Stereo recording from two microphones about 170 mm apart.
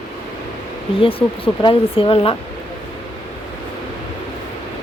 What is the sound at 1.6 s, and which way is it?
Speech, 30° left (ahead or behind).